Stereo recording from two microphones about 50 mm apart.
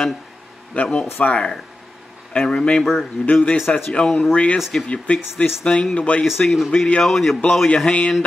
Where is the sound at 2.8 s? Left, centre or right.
Centre.